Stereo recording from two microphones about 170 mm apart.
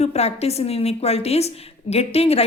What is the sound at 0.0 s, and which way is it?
A woman's voice, 40° left (ahead or behind).